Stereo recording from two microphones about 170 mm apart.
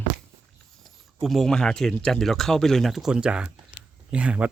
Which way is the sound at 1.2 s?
Centre (ahead or behind).